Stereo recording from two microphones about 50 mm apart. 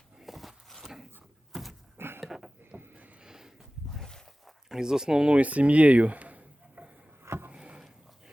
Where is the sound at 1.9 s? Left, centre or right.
Right.